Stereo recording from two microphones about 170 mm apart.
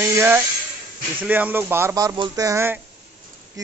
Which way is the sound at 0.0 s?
15° right (ahead or behind).